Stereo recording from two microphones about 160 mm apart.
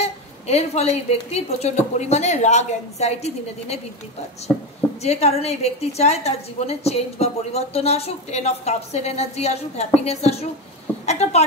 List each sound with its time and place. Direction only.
0.0 s a woman's voice: 40° left (ahead or behind)
5.0 s a woman's voice: 40° left (ahead or behind)